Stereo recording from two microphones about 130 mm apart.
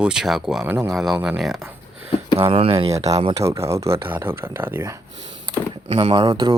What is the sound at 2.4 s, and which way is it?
Speech, 50° right (ahead or behind).